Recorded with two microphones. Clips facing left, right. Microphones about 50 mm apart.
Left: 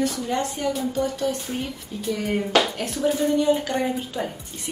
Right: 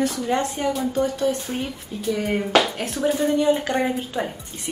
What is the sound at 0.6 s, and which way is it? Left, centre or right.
Speech, right.